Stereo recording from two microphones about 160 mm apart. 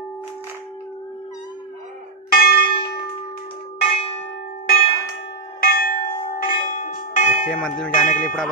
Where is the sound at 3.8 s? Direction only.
35° left (ahead or behind).